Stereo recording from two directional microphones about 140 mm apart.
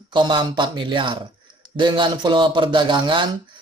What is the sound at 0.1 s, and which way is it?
Speech, 35° right (ahead or behind).